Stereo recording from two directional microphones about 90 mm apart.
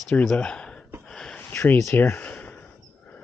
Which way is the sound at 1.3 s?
25° left (ahead or behind).